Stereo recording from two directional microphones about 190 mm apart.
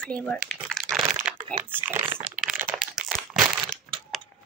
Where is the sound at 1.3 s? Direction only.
5° right (ahead or behind).